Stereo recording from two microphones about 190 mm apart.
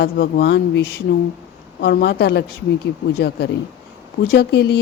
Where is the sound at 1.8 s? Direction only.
65° left (ahead or behind).